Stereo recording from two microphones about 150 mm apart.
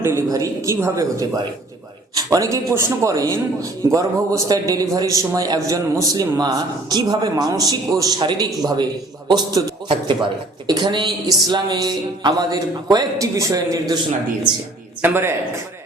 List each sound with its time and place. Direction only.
0.0 s a man's voice: 20° right (ahead or behind)
15.0 s a woman's voice: 15° right (ahead or behind)